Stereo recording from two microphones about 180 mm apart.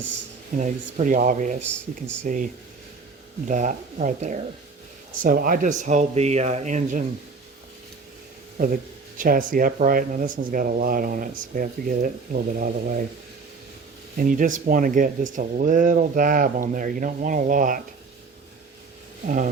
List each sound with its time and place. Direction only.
0.5 s speech: 45° right (ahead or behind)
8.5 s speech: 50° right (ahead or behind)
14.2 s speech: 50° right (ahead or behind)